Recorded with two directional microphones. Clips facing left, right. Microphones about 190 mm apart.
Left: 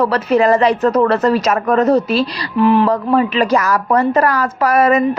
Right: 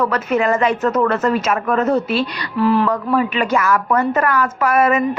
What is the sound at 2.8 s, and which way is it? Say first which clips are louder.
A woman's voice: left 3 dB; 35° left (ahead or behind).